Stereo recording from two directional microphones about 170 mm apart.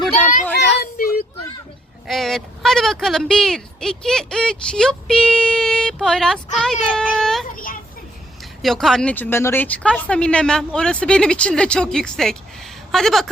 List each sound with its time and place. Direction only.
0.1 s children playing: 45° left (ahead or behind)
0.6 s child singing: 65° left (ahead or behind)
2.0 s speech: centre (ahead or behind)
7.4 s children playing: 55° left (ahead or behind)
8.6 s speech: centre (ahead or behind)